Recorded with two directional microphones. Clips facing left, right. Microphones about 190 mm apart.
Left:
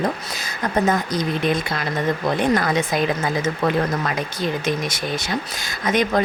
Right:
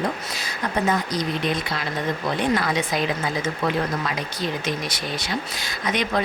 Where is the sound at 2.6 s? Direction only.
50° left (ahead or behind).